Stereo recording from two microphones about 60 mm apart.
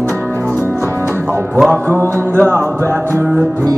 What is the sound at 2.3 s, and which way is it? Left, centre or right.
Music, right.